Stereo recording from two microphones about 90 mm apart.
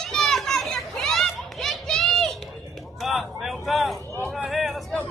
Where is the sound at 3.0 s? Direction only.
Centre (ahead or behind).